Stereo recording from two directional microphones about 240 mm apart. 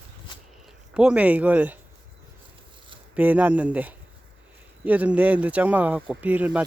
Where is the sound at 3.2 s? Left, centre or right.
Centre.